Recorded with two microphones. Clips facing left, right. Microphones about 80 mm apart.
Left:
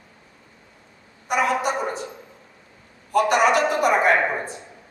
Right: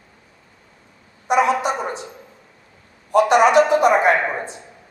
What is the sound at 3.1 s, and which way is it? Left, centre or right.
Speech, right.